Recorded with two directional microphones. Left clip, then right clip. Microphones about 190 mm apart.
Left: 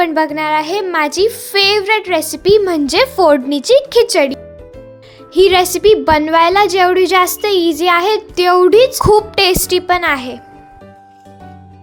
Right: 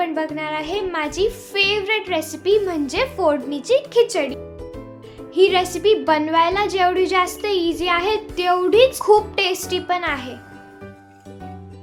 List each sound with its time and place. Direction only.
0.0 s a woman's voice: 50° left (ahead or behind)